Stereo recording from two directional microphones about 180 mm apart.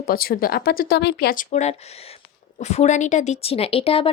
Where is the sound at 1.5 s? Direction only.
40° left (ahead or behind).